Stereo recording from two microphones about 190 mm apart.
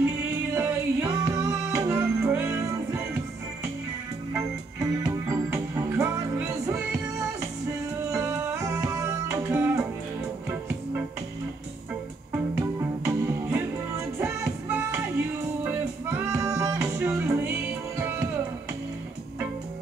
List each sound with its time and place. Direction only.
0.0 s music: 10° right (ahead or behind)
4.3 s music: 15° right (ahead or behind)
8.1 s music: 15° right (ahead or behind)
12.3 s music: 10° right (ahead or behind)